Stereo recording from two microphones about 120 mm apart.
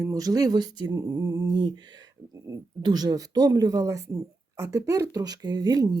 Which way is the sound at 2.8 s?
35° right (ahead or behind).